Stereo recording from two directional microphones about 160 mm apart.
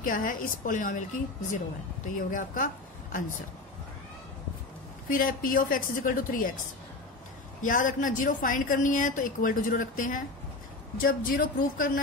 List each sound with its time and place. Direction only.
0.0 s a woman's voice: 60° left (ahead or behind)
2.0 s a woman's voice: 55° left (ahead or behind)
5.1 s a woman's voice: 60° left (ahead or behind)
7.6 s a woman's voice: 55° left (ahead or behind)